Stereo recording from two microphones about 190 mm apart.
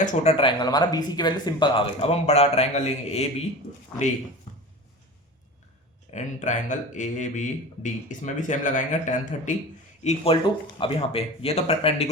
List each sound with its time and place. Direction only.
0.0 s speech: 35° left (ahead or behind)
6.1 s speech: 40° left (ahead or behind)